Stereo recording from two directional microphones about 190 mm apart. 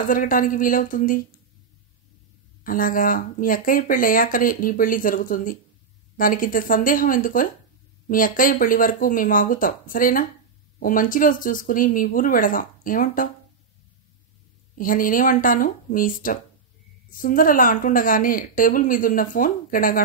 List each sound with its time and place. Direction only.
0.0 s speech: 45° left (ahead or behind)
2.6 s speech: 45° left (ahead or behind)
14.8 s speech: 45° left (ahead or behind)